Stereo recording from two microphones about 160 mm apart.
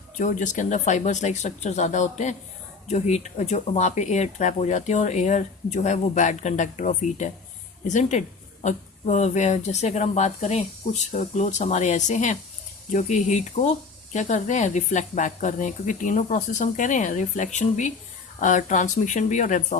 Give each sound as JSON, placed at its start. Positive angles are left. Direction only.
{"t": 0.2, "sound": "speech", "side_deg": 55}